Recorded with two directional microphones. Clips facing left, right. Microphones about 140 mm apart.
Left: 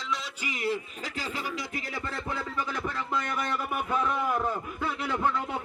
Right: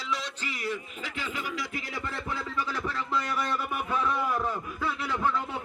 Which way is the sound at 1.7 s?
40° left (ahead or behind).